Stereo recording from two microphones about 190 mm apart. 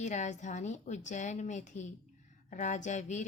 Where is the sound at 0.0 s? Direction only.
40° left (ahead or behind).